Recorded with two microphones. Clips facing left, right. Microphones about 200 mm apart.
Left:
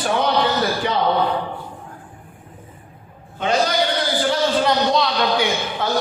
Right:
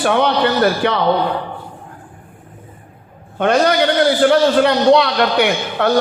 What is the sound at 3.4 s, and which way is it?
A man's voice, 60° right (ahead or behind).